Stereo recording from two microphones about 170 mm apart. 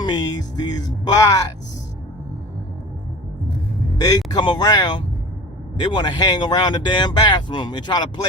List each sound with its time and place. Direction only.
0.0 s speech: 25° left (ahead or behind)
4.3 s speech: 25° left (ahead or behind)